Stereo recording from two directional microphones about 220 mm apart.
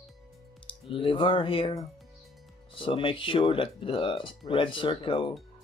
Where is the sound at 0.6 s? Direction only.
25° left (ahead or behind).